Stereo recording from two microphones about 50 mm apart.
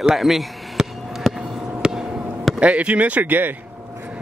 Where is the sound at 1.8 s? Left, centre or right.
Centre.